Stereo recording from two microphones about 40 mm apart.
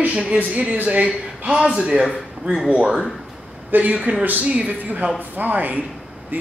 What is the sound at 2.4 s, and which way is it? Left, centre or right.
Speech, right.